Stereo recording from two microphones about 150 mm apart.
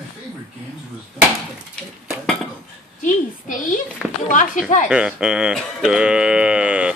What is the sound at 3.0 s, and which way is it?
Speech, 55° left (ahead or behind).